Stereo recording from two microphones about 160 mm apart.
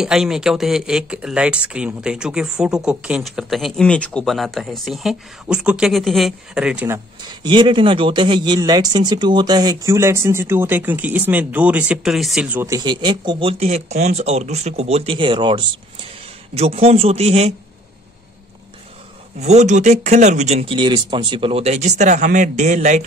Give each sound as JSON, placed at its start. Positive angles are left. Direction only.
{"t": 0.0, "sound": "speech", "side_deg": -5}
{"t": 7.2, "sound": "a man's voice", "side_deg": -30}
{"t": 19.4, "sound": "speech", "side_deg": -45}